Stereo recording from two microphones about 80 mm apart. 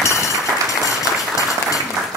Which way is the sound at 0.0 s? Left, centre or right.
Left.